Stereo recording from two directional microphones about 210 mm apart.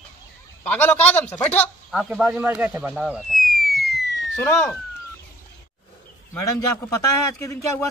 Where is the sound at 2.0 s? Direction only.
5° right (ahead or behind).